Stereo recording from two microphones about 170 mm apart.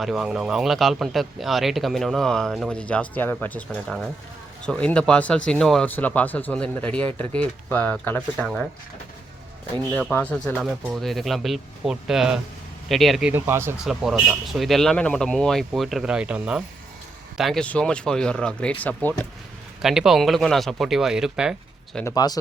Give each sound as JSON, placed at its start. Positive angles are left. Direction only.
{"t": 0.0, "sound": "speech", "side_deg": 0}
{"t": 9.7, "sound": "speech", "side_deg": 10}
{"t": 13.7, "sound": "speech", "side_deg": 0}
{"t": 19.8, "sound": "speech", "side_deg": -5}
{"t": 22.0, "sound": "speech", "side_deg": 20}